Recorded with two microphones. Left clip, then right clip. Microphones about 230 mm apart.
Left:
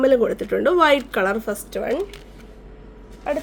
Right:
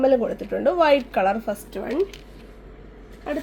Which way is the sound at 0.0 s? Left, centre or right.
Left.